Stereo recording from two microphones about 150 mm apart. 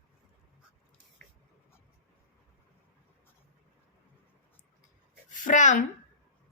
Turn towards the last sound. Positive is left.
turn(degrees=60)  # may be behind; listen again after turning